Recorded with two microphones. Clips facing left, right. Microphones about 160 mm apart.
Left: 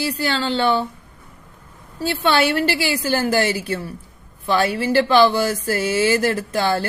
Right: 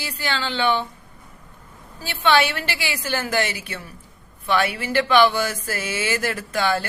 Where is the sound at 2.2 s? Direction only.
35° left (ahead or behind).